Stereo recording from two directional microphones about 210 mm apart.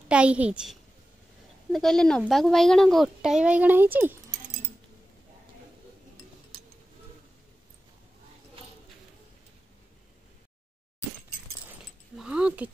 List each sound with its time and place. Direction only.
0.1 s a woman's voice: 5° right (ahead or behind)
6.5 s tick-tock: 45° right (ahead or behind)
12.2 s speech: 5° right (ahead or behind)